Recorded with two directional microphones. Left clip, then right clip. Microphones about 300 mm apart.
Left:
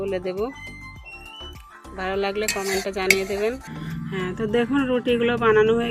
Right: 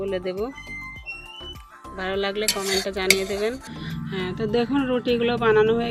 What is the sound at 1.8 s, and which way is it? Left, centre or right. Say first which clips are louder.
Speech: left 1 dB; centre.